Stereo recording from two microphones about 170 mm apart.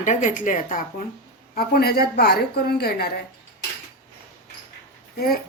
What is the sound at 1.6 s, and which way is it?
A woman's voice, 65° left (ahead or behind).